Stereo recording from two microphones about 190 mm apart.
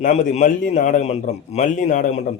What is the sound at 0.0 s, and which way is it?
A man's voice, 40° left (ahead or behind).